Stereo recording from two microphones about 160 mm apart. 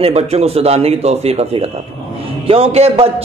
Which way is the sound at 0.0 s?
40° right (ahead or behind).